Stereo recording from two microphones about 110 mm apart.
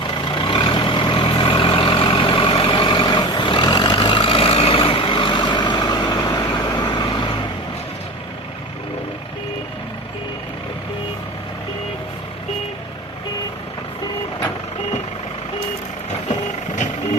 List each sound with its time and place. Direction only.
0.0 s vehicle: 45° left (ahead or behind)
5.1 s vehicle: 45° left (ahead or behind)
16.3 s vehicle: 90° left